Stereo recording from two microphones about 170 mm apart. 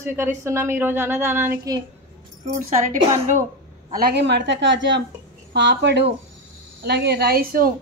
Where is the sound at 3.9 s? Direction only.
65° right (ahead or behind); by 6.1 s 90° right.